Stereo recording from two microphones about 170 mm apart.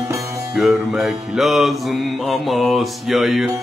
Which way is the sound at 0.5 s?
Centre (ahead or behind).